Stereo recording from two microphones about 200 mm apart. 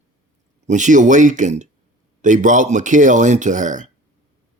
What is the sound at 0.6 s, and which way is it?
Speech, 40° right (ahead or behind).